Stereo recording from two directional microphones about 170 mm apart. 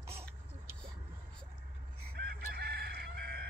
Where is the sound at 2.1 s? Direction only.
70° right (ahead or behind).